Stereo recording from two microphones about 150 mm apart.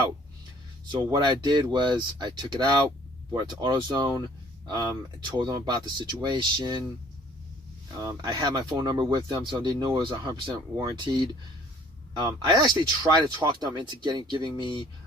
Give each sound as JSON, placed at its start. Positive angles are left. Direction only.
{"t": 0.9, "sound": "speech", "side_deg": -30}
{"t": 8.0, "sound": "speech", "side_deg": -25}